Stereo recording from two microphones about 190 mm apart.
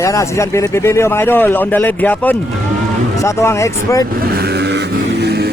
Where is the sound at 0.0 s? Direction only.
15° left (ahead or behind).